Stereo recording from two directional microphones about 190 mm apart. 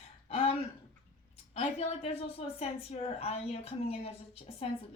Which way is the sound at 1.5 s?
30° left (ahead or behind).